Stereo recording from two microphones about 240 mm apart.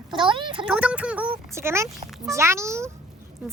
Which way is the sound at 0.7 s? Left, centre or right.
Centre.